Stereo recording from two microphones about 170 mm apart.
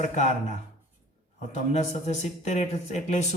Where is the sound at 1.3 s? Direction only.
40° left (ahead or behind).